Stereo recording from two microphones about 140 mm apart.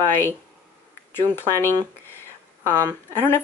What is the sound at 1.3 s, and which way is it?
Speech, 15° left (ahead or behind).